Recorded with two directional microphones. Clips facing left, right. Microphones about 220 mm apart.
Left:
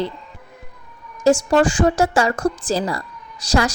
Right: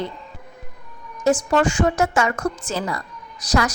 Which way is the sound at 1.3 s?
35° left (ahead or behind).